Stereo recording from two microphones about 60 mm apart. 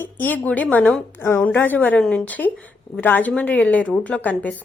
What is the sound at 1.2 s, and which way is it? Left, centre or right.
Speech, left.